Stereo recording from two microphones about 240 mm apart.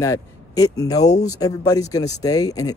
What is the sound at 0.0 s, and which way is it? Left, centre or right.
Speech, centre.